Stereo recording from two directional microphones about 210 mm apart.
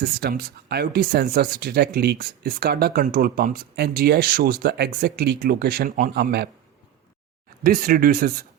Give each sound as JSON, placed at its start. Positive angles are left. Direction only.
{"t": 0.0, "sound": "speech", "side_deg": -50}
{"t": 7.6, "sound": "speech", "side_deg": -45}